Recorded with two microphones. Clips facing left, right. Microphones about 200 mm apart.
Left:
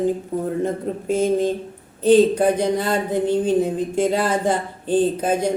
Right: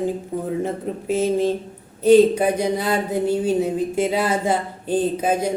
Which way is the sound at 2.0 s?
10° right (ahead or behind).